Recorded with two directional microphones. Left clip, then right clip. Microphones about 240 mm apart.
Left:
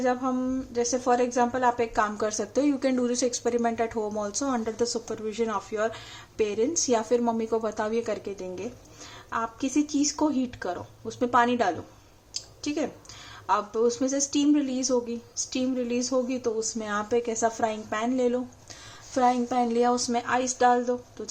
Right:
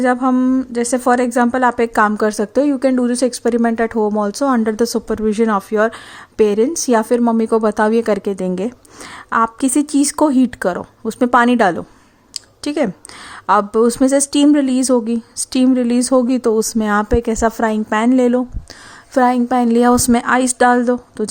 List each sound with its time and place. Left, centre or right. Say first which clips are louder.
0.0 s a woman's voice: right 11 dB; right